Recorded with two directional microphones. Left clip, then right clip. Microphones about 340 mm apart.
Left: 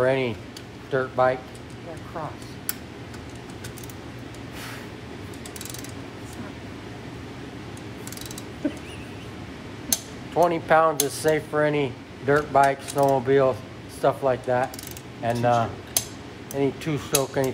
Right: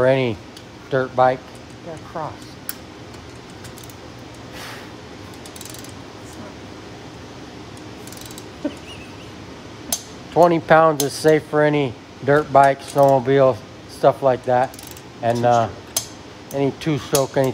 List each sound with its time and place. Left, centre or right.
0.0 s speech: right
10.3 s speech: right